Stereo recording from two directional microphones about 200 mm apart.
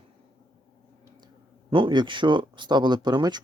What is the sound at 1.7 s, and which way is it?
Speech, 25° right (ahead or behind).